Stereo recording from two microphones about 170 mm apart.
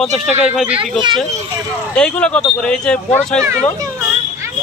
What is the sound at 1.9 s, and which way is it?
Speech, 5° left (ahead or behind).